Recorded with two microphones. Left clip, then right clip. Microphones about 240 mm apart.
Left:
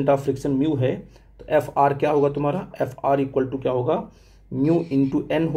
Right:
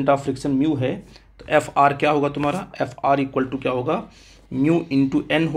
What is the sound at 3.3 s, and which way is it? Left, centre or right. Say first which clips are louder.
Speech: even; right.